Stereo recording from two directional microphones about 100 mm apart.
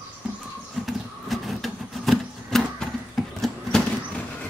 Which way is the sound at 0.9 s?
Centre (ahead or behind).